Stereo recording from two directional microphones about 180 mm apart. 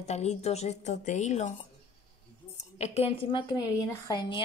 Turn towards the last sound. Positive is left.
turn(degrees=25)  # may be behind; listen again after turning